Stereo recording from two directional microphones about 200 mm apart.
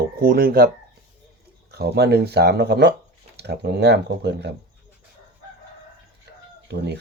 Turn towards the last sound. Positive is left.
turn(degrees=-55)  # may be behind; listen again after turning